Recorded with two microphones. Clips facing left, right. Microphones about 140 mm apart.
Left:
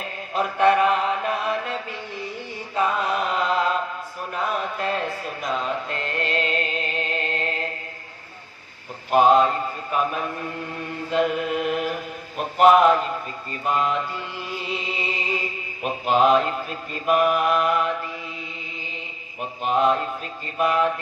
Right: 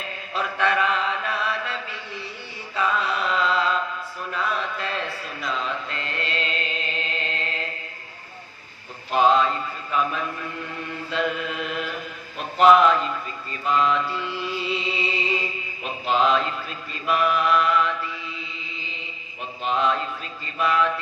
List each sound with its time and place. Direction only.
0.3 s chant: 50° left (ahead or behind)
4.3 s mantra: 45° left (ahead or behind)
9.1 s mantra: 50° left (ahead or behind)
11.1 s chant: 50° left (ahead or behind)
12.5 s mantra: 50° left (ahead or behind)
19.6 s mantra: 50° left (ahead or behind)